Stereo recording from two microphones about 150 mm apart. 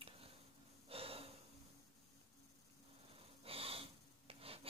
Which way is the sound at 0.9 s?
40° right (ahead or behind).